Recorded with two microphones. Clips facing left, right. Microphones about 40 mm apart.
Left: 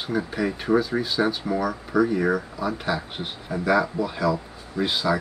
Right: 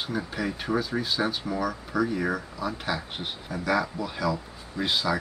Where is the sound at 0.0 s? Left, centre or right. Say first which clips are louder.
Left 4 dB; centre.